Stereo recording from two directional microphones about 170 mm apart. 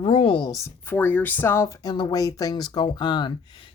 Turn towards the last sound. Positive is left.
turn(degrees=25)  # may be behind; listen again after turning